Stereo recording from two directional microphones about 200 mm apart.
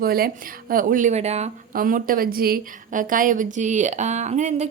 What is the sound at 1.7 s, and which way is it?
A woman's voice, 45° right (ahead or behind).